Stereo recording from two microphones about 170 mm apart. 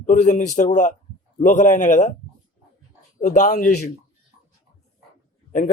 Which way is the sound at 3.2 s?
45° left (ahead or behind).